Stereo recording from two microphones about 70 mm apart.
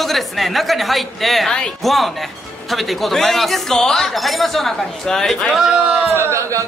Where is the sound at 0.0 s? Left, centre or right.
Centre.